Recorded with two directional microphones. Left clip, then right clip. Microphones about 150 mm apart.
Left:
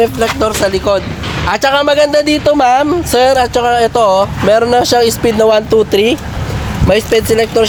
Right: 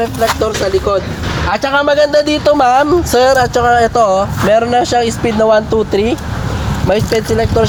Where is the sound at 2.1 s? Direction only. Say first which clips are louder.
Even; 30° left (ahead or behind).